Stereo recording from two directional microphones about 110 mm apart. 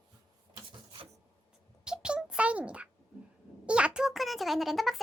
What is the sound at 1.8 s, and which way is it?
A child's voice, 5° right (ahead or behind).